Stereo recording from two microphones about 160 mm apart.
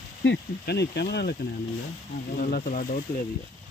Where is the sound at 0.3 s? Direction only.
90° left.